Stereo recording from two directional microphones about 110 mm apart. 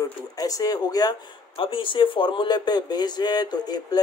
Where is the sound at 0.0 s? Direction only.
35° left (ahead or behind).